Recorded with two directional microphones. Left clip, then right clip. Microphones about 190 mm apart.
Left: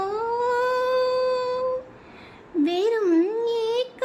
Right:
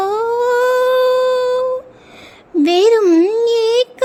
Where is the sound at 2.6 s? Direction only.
40° right (ahead or behind).